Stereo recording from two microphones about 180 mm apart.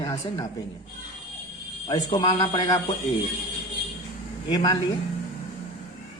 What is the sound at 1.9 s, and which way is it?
Speech, 20° left (ahead or behind).